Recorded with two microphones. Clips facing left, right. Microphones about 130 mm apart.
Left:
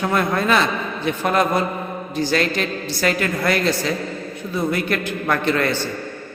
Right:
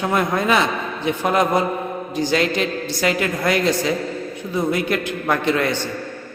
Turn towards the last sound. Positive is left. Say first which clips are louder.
# even
turn(degrees=-15)  # may be behind; listen again after turning